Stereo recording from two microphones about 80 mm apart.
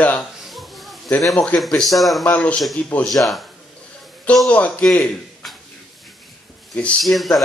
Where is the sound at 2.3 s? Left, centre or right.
Centre.